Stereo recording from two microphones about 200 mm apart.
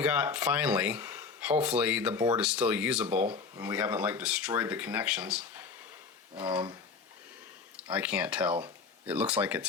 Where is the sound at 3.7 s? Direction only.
5° right (ahead or behind).